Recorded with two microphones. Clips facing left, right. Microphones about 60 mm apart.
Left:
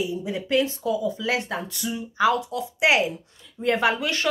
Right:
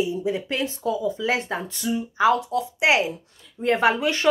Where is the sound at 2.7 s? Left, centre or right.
Centre.